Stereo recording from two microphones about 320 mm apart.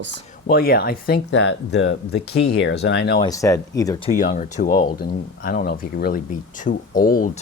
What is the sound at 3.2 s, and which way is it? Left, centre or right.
Speech, centre.